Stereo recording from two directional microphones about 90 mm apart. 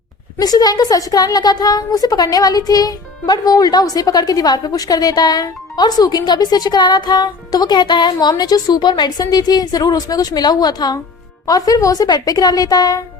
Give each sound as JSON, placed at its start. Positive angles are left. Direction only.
{"t": 0.3, "sound": "speech", "side_deg": 45}